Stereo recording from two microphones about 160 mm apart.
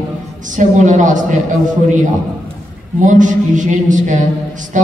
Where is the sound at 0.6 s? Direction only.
50° right (ahead or behind).